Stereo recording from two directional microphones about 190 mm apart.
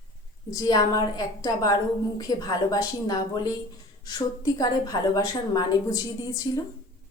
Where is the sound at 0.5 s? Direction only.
20° left (ahead or behind).